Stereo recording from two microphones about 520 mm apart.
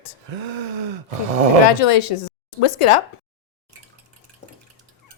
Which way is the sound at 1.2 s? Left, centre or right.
Right.